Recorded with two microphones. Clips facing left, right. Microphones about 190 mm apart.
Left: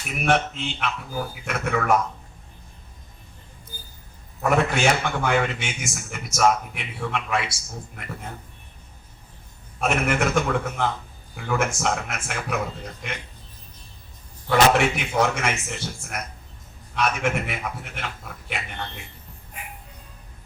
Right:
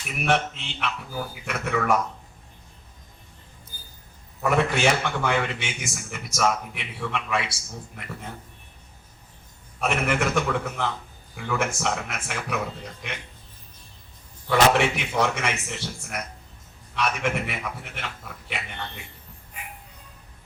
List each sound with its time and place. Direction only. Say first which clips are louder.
0.3 s a man's voice: left 2 dB; 50° left (ahead or behind)
4.4 s a man's voice: left 1 dB; 50° left (ahead or behind)
9.8 s a man's voice: left 2 dB; 45° left (ahead or behind)
14.5 s a man's voice: left 1 dB; 45° left (ahead or behind)